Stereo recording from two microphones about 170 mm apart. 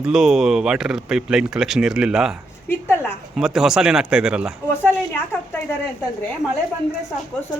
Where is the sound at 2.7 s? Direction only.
15° left (ahead or behind).